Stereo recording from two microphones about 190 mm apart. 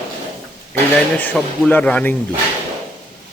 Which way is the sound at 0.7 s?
10° left (ahead or behind).